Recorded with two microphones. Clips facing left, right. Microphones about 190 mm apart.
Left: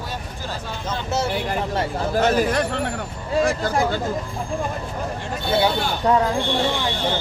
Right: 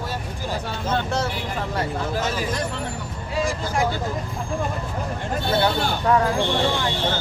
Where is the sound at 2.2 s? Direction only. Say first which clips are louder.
Left 6 dB; 55° left (ahead or behind).